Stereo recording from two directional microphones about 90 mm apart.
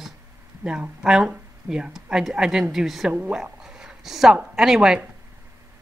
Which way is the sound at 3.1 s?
10° right (ahead or behind).